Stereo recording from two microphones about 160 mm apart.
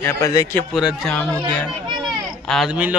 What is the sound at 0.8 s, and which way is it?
Speech, centre (ahead or behind).